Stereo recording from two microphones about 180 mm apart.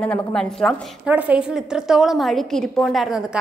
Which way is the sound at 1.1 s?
10° right (ahead or behind).